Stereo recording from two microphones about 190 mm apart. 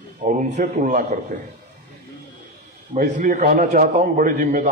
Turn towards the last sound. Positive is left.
turn(degrees=-40)  # may be behind; listen again after turning